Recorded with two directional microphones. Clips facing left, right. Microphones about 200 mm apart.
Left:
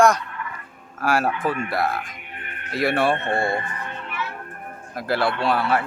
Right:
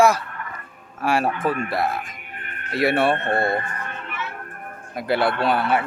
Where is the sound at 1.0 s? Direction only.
Centre (ahead or behind).